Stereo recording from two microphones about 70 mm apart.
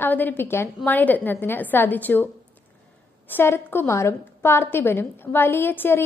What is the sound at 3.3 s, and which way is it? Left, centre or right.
A woman's voice, left.